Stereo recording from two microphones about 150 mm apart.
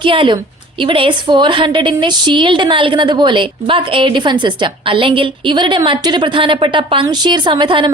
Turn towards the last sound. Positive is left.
turn(degrees=-30)  # may be behind; listen again after turning